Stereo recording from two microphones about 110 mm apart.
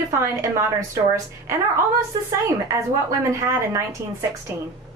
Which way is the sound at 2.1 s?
35° right (ahead or behind).